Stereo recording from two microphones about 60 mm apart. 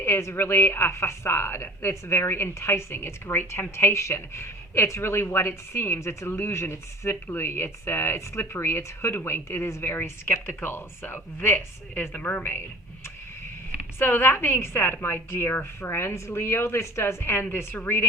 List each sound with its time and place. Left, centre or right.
0.0 s a woman's voice: left
14.0 s a woman's voice: left